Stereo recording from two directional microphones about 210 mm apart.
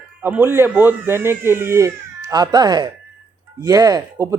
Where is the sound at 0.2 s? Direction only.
10° right (ahead or behind).